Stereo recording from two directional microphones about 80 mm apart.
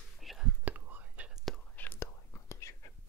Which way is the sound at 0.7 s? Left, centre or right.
Right.